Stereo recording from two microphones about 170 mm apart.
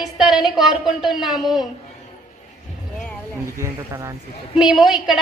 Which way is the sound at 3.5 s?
15° right (ahead or behind).